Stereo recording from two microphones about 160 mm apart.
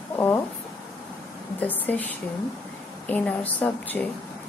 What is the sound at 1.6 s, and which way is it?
Speech, 10° left (ahead or behind).